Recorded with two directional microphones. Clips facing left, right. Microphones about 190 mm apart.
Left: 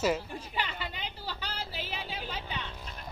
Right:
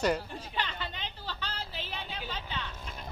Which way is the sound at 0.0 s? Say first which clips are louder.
Even; 5° left (ahead or behind).